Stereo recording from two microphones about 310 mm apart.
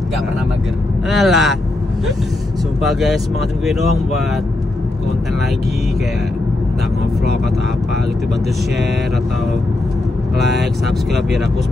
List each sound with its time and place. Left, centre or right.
1.1 s speech: centre
2.8 s speech: centre
10.4 s speech: centre